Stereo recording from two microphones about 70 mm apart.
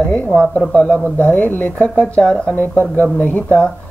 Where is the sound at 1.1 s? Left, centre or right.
Left.